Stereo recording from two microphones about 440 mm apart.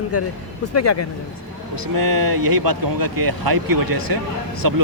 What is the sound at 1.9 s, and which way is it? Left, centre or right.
Speech, right.